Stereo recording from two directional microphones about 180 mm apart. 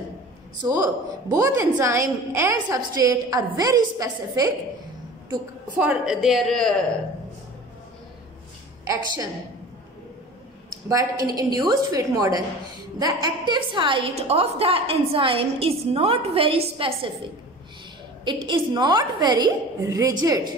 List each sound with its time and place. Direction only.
0.7 s a woman's voice: 20° right (ahead or behind)
5.3 s a woman's voice: 5° right (ahead or behind)
8.8 s a woman's voice: 20° right (ahead or behind)
10.9 s a woman's voice: 20° right (ahead or behind)
18.2 s a woman's voice: 25° right (ahead or behind)